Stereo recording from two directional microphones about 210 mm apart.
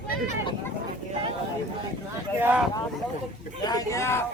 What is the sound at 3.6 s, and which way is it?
Speech, 15° left (ahead or behind).